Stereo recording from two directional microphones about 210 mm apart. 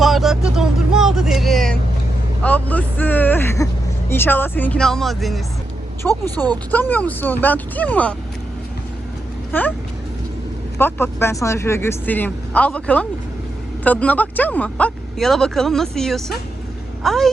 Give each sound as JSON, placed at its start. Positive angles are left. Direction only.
{"t": 0.0, "sound": "vehicle", "side_deg": 0}
{"t": 2.4, "sound": "speech", "side_deg": 5}
{"t": 6.1, "sound": "speech", "side_deg": -15}
{"t": 6.7, "sound": "speech", "side_deg": 10}
{"t": 9.5, "sound": "speech", "side_deg": 10}
{"t": 10.8, "sound": "speech", "side_deg": 10}